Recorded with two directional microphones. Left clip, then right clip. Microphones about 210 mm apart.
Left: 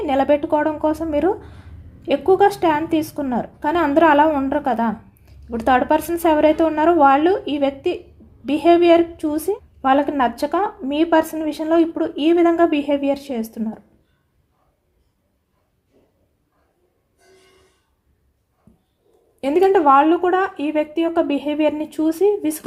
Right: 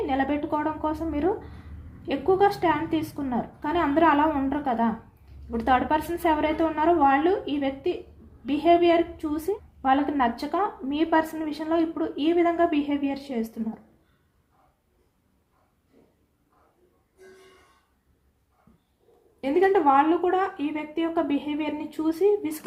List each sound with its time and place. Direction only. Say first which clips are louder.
0.0 s a woman's voice: left 9 dB; 50° left (ahead or behind)
19.4 s a woman's voice: left 6 dB; 50° left (ahead or behind)